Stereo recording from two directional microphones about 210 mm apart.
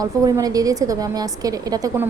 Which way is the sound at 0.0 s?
15° right (ahead or behind).